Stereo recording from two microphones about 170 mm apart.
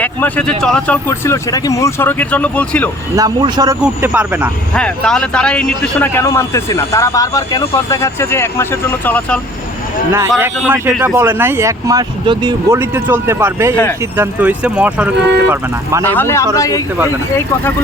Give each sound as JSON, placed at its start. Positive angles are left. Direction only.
{"t": 0.0, "sound": "a man's voice", "side_deg": 10}
{"t": 3.2, "sound": "a man's voice", "side_deg": -25}
{"t": 3.8, "sound": "speech", "side_deg": -10}
{"t": 4.7, "sound": "a man's voice", "side_deg": 5}
{"t": 10.1, "sound": "speech", "side_deg": -15}
{"t": 12.7, "sound": "speech", "side_deg": -15}
{"t": 16.0, "sound": "a man's voice", "side_deg": 15}